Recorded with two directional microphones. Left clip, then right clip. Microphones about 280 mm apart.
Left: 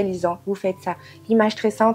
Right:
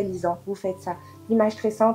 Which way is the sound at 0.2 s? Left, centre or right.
Left.